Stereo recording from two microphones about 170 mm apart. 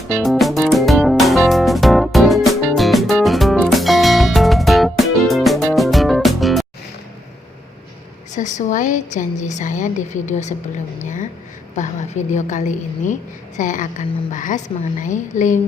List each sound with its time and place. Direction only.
0.2 s music: centre (ahead or behind)
8.3 s a woman's voice: 45° left (ahead or behind)